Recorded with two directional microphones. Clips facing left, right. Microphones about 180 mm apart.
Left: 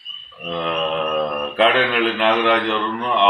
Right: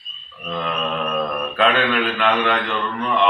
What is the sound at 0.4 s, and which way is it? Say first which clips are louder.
Speech: left 2 dB; 20° left (ahead or behind).